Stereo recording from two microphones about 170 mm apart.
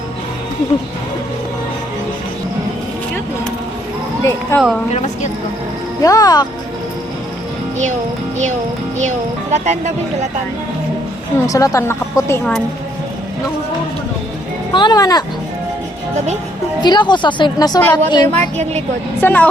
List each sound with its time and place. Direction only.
4.2 s speech: 15° left (ahead or behind)
6.0 s speech: 20° left (ahead or behind)
11.4 s speech: 20° left (ahead or behind)
14.7 s speech: 25° left (ahead or behind)
16.8 s speech: 25° left (ahead or behind)
18.3 s a woman's voice: 40° right (ahead or behind)
19.2 s speech: 10° left (ahead or behind)